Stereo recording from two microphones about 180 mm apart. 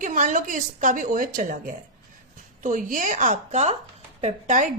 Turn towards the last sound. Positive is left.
turn(degrees=-45)  # may be behind; listen again after turning